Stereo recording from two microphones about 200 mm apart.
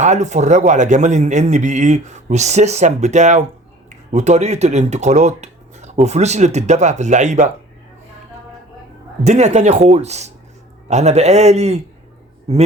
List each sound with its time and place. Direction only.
0.0 s a man's voice: 35° right (ahead or behind)
9.2 s a man's voice: 35° right (ahead or behind)